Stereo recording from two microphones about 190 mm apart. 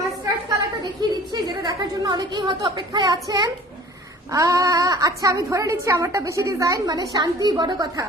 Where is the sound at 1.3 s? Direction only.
20° right (ahead or behind).